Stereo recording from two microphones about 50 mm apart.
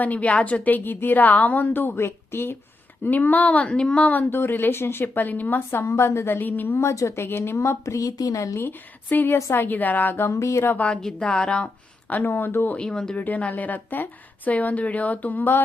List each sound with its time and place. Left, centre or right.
0.0 s a woman's voice: left
3.0 s speech: left; by 4.0 s centre
4.0 s a woman's voice: left
4.3 s a woman's voice: left
5.8 s a woman's voice: left
6.7 s speech: left
7.2 s speech: left
9.0 s a woman's voice: left
10.2 s speech: left
11.3 s speech: left
12.3 s a woman's voice: left
12.7 s speech: centre
13.1 s a woman's voice: left